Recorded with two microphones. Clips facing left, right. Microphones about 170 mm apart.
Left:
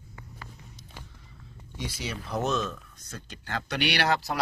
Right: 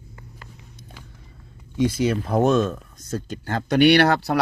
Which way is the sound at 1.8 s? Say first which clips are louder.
Right 15 dB; 50° right (ahead or behind).